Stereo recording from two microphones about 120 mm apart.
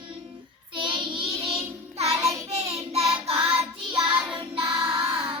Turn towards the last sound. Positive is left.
turn(degrees=-50)  # may be behind; listen again after turning